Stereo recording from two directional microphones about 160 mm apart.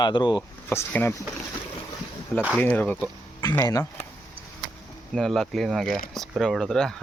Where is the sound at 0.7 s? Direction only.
15° left (ahead or behind).